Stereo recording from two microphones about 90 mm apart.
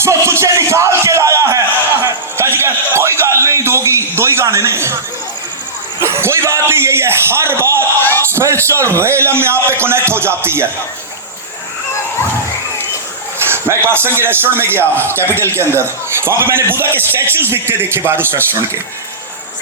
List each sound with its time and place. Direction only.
0.0 s music: 30° right (ahead or behind)
2.0 s a sound: 30° right (ahead or behind)
6.0 s a man's voice: 30° right (ahead or behind)
13.4 s a man's voice: 25° right (ahead or behind)